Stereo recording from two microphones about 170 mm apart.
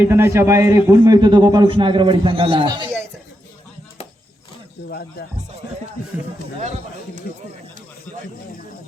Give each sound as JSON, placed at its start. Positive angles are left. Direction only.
{"t": 0.0, "sound": "a man's voice", "side_deg": -15}